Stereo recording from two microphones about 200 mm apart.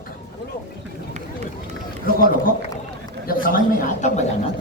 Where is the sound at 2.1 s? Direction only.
45° left (ahead or behind).